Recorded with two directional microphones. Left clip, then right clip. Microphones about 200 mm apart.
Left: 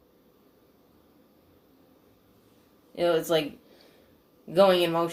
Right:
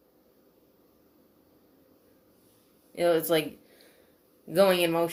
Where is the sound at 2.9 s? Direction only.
50° right (ahead or behind).